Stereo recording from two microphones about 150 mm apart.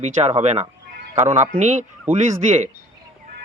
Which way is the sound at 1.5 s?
55° right (ahead or behind).